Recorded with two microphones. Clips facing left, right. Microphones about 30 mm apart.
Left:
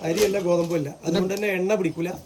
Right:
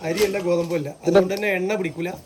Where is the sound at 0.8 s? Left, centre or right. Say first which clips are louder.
Right 7 dB; centre.